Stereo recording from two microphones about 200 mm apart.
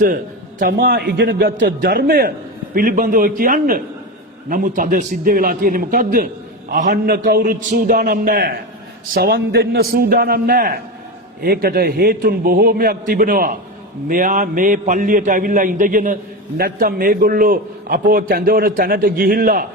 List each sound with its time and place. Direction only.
0.6 s a man's voice: 50° right (ahead or behind)